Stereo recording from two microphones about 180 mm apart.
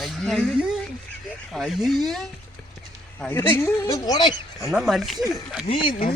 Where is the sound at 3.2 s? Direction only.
10° left (ahead or behind).